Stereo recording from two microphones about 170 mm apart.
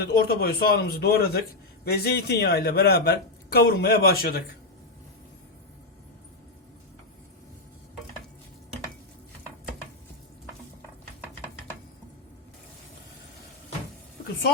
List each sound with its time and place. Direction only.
0.0 s a man's voice: 65° left (ahead or behind)